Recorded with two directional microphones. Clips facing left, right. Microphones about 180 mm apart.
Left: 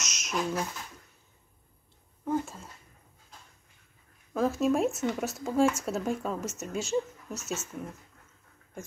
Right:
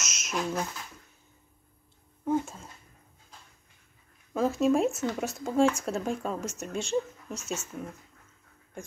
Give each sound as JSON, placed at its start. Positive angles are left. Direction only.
{"t": 0.0, "sound": "a sound", "side_deg": 0}
{"t": 2.2, "sound": "speech", "side_deg": 0}
{"t": 4.3, "sound": "speech", "side_deg": 0}